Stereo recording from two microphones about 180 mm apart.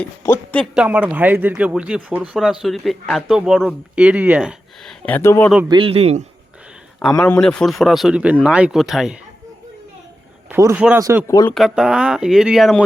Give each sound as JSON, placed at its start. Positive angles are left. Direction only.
{"t": 0.0, "sound": "speech", "side_deg": 10}
{"t": 0.7, "sound": "speech", "side_deg": -5}
{"t": 5.6, "sound": "a man's voice", "side_deg": -30}
{"t": 7.4, "sound": "speech", "side_deg": 5}
{"t": 10.5, "sound": "speech", "side_deg": -15}
{"t": 11.3, "sound": "speech", "side_deg": 20}
{"t": 11.5, "sound": "speech", "side_deg": 0}